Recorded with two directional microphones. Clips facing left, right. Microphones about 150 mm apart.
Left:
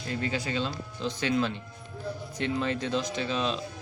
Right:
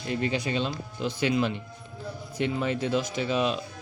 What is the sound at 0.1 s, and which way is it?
Speech, 20° right (ahead or behind).